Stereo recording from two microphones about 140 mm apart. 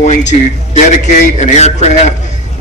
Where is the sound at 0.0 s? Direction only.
55° left (ahead or behind).